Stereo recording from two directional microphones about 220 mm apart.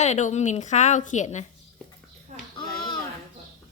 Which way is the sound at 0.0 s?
30° left (ahead or behind).